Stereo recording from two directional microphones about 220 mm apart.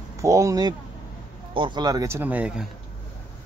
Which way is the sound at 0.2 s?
15° right (ahead or behind).